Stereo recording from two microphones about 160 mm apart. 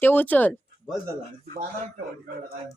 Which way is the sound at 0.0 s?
10° left (ahead or behind).